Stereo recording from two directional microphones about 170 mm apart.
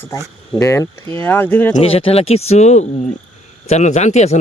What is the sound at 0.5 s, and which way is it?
Speech, 15° left (ahead or behind).